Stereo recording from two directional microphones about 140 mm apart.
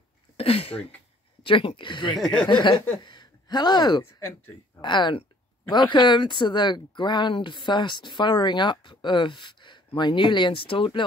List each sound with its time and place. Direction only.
0.4 s speech: 40° left (ahead or behind)
2.1 s speech: centre (ahead or behind)
2.4 s speech: 35° left (ahead or behind)
4.0 s speech: 15° left (ahead or behind)
4.8 s speech: 35° left (ahead or behind)